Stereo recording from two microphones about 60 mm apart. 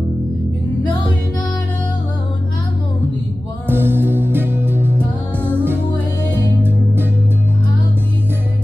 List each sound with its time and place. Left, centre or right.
3.6 s music: right